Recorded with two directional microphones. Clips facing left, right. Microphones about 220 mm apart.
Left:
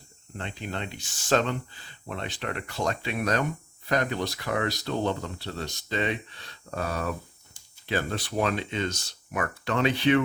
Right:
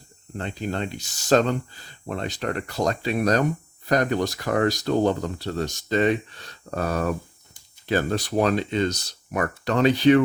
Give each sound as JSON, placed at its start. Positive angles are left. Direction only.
{"t": 0.3, "sound": "speech", "side_deg": -40}